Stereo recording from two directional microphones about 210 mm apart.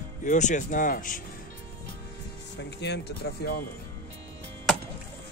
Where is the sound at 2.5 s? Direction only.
55° left (ahead or behind).